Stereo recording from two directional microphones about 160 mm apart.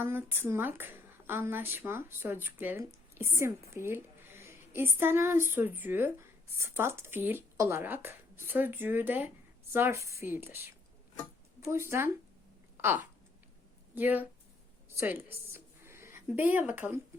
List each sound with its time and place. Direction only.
0.0 s a woman's voice: 15° right (ahead or behind)
12.7 s a sound: 15° right (ahead or behind)
13.9 s a woman's voice: 10° right (ahead or behind)